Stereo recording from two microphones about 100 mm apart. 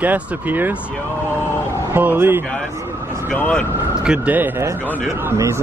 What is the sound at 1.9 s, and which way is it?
Speech, 20° right (ahead or behind).